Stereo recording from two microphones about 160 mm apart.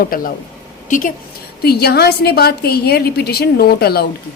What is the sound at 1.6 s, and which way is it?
A woman's voice, 80° left.